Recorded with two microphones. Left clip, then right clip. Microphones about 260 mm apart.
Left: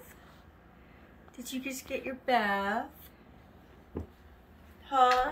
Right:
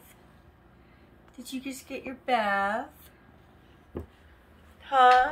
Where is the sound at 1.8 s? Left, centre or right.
Centre.